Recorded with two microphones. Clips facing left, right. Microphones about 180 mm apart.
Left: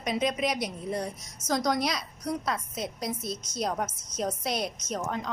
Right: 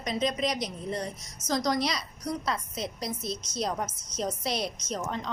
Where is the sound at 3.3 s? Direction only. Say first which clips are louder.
Right 1 dB; 50° left (ahead or behind).